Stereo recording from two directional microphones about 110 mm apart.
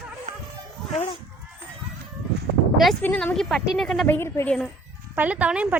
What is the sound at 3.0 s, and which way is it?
Speech, 15° left (ahead or behind).